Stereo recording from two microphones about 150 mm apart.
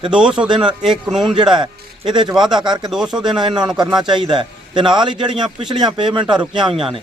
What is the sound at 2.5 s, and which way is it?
Speech, 30° right (ahead or behind).